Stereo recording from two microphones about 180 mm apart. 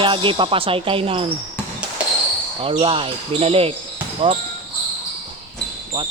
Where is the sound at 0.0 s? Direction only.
30° right (ahead or behind).